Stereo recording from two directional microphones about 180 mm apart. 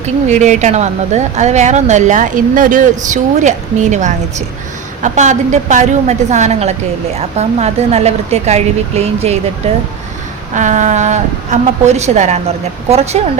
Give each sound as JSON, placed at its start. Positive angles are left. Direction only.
{"t": 0.0, "sound": "speech", "side_deg": -40}